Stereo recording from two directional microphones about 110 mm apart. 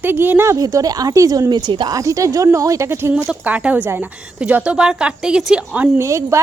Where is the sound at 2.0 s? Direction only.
30° right (ahead or behind); by 5.9 s 10° right (ahead or behind).